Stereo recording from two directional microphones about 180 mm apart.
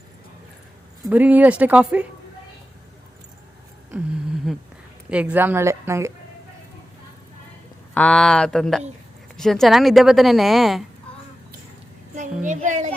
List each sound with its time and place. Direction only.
1.1 s a woman's voice: 10° right (ahead or behind)
4.5 s a woman's voice: centre (ahead or behind)
7.9 s a woman's voice: 5° left (ahead or behind)
12.4 s a child's voice: 45° right (ahead or behind)